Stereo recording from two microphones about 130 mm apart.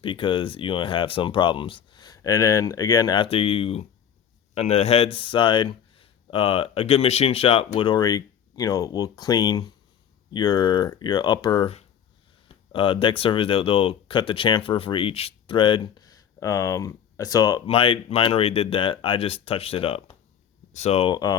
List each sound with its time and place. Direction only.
0.0 s speech: 40° left (ahead or behind)
3.2 s speech: 45° left (ahead or behind); by 17.6 s 30° left (ahead or behind)
17.7 s speech: 45° left (ahead or behind)
21.1 s speech: 30° left (ahead or behind)